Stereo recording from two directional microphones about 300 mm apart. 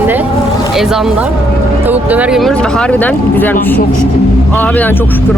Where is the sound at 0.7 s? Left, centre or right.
Centre.